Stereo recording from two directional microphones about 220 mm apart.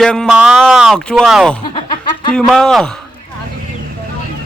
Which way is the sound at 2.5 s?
Centre (ahead or behind).